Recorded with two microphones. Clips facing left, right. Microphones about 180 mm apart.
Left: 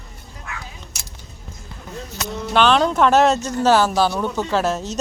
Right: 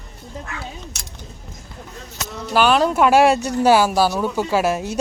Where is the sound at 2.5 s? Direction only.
5° right (ahead or behind).